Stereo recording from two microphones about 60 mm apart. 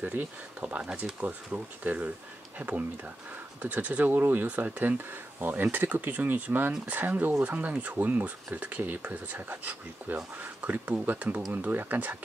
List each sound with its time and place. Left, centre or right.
0.0 s speech: right
0.8 s speech: centre
1.2 s speech: right
2.6 s speech: right
3.6 s speech: right